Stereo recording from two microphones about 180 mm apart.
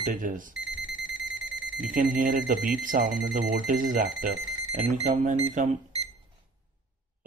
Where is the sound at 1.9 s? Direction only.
50° right (ahead or behind).